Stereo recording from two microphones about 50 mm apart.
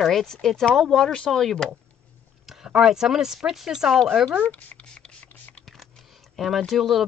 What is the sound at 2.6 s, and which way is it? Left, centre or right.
Speech, centre.